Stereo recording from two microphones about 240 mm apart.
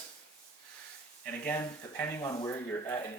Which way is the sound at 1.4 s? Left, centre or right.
Centre.